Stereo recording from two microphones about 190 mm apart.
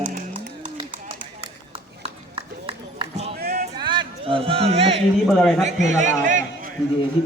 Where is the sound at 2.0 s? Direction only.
30° right (ahead or behind).